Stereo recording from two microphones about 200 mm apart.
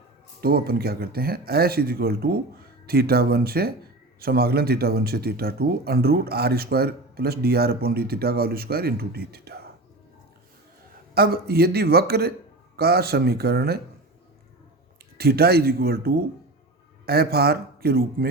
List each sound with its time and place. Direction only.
0.4 s speech: 50° right (ahead or behind)
11.1 s speech: 50° right (ahead or behind)
15.2 s speech: 50° right (ahead or behind)